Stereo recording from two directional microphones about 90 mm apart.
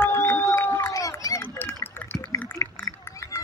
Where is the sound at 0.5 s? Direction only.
25° left (ahead or behind).